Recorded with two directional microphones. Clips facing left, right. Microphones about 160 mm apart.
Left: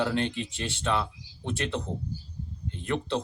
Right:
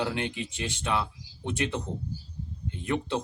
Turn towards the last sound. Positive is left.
turn(degrees=-15)  # may be behind; listen again after turning